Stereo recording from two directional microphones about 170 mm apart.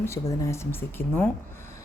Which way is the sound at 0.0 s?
15° left (ahead or behind).